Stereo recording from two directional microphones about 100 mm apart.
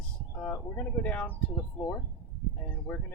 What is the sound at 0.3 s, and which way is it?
Speech, 15° left (ahead or behind).